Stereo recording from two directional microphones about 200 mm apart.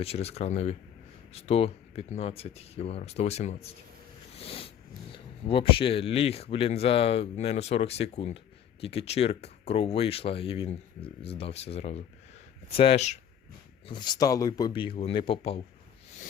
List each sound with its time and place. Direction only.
0.0 s speech: 30° left (ahead or behind)
4.4 s a sound: 30° left (ahead or behind)
5.1 s speech: 25° left (ahead or behind)